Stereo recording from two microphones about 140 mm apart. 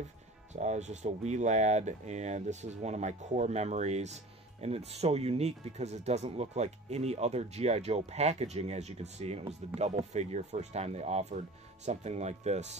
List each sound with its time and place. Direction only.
0.5 s speech: 55° right (ahead or behind)